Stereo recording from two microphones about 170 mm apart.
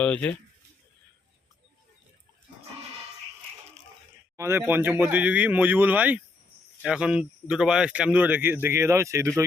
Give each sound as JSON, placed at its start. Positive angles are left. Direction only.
{"t": 0.0, "sound": "speech", "side_deg": 10}
{"t": 4.4, "sound": "speech", "side_deg": -15}